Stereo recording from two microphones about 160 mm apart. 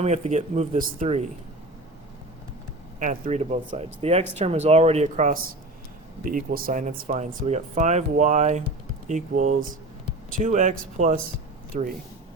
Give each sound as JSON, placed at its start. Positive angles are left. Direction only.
{"t": 0.0, "sound": "speech", "side_deg": -45}
{"t": 3.0, "sound": "speech", "side_deg": -50}
{"t": 6.2, "sound": "speech", "side_deg": -60}